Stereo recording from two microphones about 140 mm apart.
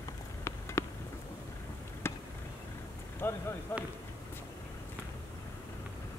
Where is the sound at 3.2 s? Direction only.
15° left (ahead or behind).